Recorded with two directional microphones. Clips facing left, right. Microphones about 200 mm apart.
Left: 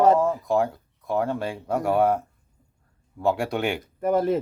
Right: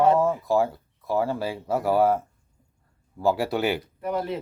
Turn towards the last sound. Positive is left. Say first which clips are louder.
# left 6 dB
turn(degrees=45)  # may be behind; listen again after turning